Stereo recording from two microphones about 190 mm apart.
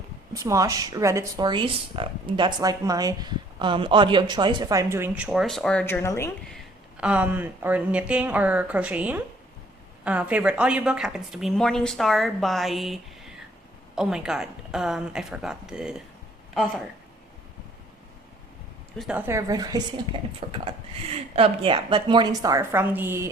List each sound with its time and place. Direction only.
0.3 s speech: 15° right (ahead or behind); by 6.3 s 15° left (ahead or behind)
6.5 s a woman's voice: 5° right (ahead or behind)
18.9 s speech: 5° right (ahead or behind)